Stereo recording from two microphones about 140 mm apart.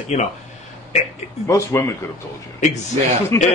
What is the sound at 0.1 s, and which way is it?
Speech, 55° left (ahead or behind).